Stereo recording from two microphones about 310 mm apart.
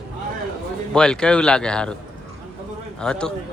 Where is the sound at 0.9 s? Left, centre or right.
Centre.